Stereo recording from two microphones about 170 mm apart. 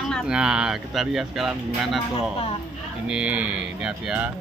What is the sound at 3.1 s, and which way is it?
Speech, 5° right (ahead or behind).